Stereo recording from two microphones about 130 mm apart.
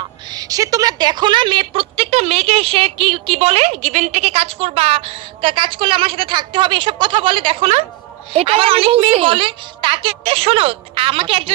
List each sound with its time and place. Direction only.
0.3 s a woman's voice: 30° right (ahead or behind); by 11.5 s 45° right (ahead or behind)